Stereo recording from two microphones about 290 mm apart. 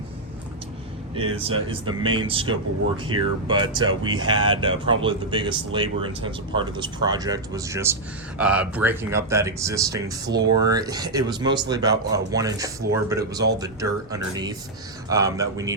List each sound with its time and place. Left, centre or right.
1.1 s speech: centre